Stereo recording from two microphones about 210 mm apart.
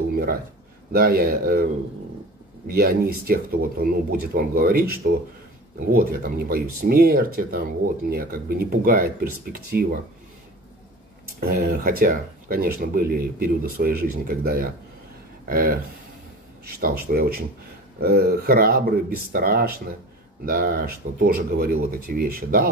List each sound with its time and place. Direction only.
0.1 s a sound: 45° right (ahead or behind)
0.9 s speech: 45° right (ahead or behind)
2.7 s speech: 45° right (ahead or behind)
11.3 s speech: 40° right (ahead or behind)